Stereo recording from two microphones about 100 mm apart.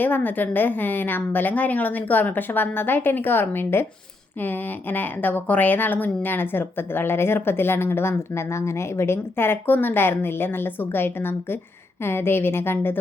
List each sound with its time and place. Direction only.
0.0 s speech: 20° left (ahead or behind)